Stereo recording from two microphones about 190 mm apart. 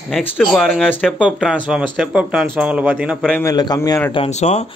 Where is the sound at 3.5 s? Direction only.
20° left (ahead or behind); by 4.6 s 35° left (ahead or behind).